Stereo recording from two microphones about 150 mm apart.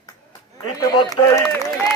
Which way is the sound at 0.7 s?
25° left (ahead or behind).